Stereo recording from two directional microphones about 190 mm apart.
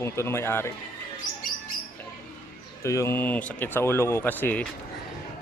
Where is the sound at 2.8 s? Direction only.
15° left (ahead or behind).